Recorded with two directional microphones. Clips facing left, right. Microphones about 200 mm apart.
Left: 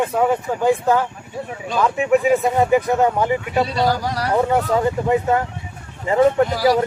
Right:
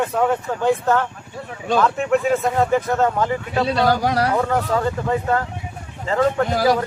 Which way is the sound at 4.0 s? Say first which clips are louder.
Right 5 dB; 65° right (ahead or behind).